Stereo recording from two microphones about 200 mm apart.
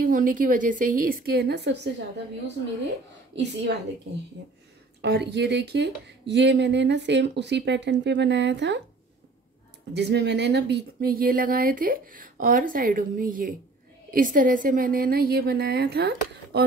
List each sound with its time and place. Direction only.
0.0 s speech: 45° right (ahead or behind)
3.3 s speech: 55° right (ahead or behind)
9.9 s speech: 55° right (ahead or behind)